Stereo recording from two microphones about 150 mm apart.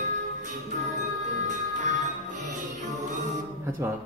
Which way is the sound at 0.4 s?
55° right (ahead or behind).